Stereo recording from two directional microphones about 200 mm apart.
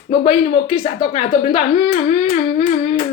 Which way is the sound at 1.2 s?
40° left (ahead or behind).